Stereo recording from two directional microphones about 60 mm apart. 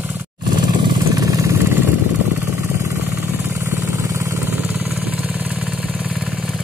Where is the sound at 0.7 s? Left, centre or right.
Right.